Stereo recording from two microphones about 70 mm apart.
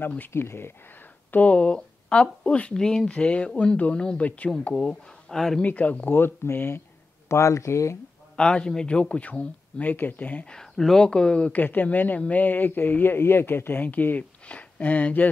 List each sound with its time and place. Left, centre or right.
0.3 s speech: left
1.3 s speech: centre
5.3 s speech: centre
5.6 s speech: left
7.2 s speech: left
8.4 s speech: centre
10.5 s speech: centre
11.6 s speech: left